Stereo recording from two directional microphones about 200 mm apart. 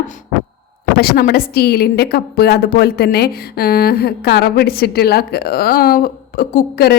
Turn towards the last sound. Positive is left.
turn(degrees=50)  # may be behind; listen again after turning